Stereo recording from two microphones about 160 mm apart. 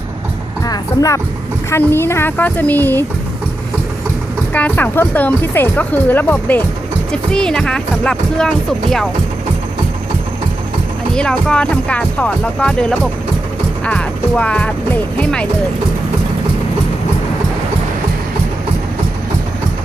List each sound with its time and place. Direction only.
0.6 s music: 20° left (ahead or behind)
1.7 s speech: 15° left (ahead or behind)
4.5 s speech: 10° left (ahead or behind)
11.1 s speech: 5° left (ahead or behind)